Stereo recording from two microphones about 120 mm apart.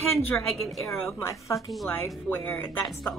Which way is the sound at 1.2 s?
25° left (ahead or behind).